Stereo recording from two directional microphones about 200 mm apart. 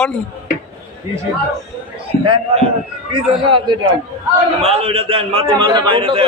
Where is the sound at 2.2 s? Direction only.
30° right (ahead or behind).